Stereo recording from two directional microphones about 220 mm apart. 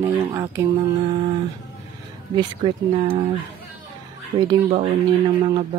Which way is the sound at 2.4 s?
20° right (ahead or behind).